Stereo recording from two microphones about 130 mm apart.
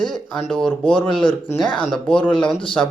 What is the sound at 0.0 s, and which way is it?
Speech, 5° left (ahead or behind).